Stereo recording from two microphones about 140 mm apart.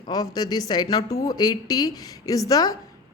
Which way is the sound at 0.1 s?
30° left (ahead or behind).